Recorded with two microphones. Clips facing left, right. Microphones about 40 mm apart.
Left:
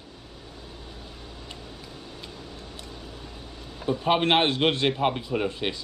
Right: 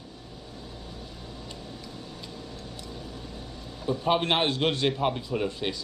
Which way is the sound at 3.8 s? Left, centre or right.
Left.